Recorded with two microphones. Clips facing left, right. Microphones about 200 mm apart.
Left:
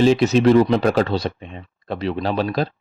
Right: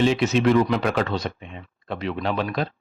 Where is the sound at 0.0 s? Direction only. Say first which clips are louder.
Left 5 dB; 35° left (ahead or behind).